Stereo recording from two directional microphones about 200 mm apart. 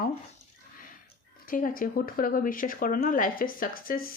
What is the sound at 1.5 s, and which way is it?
Speech, 45° left (ahead or behind).